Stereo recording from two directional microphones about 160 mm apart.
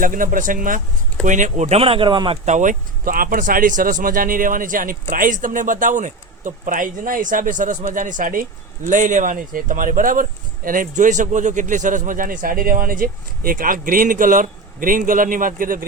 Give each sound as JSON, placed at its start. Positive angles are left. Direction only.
{"t": 0.0, "sound": "speech", "side_deg": -55}
{"t": 1.6, "sound": "speech", "side_deg": -35}
{"t": 2.4, "sound": "speech", "side_deg": -50}